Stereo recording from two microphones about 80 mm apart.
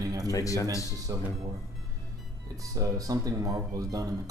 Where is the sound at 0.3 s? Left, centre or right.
Left.